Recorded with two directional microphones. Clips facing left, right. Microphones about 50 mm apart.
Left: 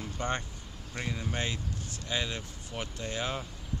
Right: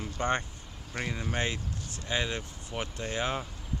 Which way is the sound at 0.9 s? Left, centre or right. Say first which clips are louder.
Right 2 dB; centre.